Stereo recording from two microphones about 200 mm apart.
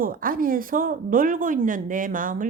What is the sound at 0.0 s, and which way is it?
Speech, 45° right (ahead or behind).